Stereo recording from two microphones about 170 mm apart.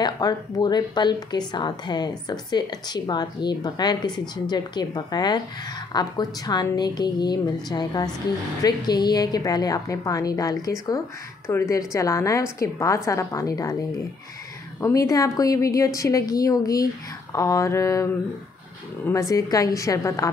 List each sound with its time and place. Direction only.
0.0 s a woman's voice: 25° left (ahead or behind)
14.8 s a woman's voice: 20° left (ahead or behind)
19.0 s a woman's voice: 20° left (ahead or behind)